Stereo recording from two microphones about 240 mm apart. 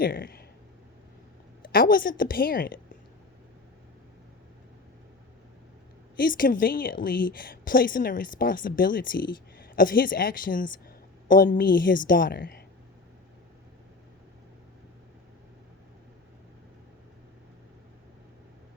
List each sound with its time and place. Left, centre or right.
0.0 s speech: left
1.6 s a woman's voice: left
6.1 s a woman's voice: left